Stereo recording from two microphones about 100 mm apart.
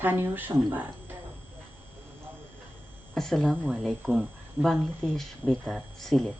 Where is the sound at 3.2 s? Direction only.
5° left (ahead or behind).